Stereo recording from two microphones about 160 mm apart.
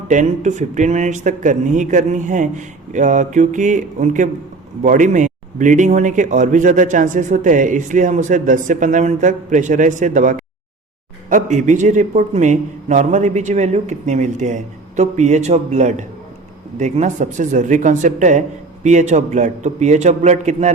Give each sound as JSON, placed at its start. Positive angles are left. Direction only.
{"t": 0.1, "sound": "a man's voice", "side_deg": -50}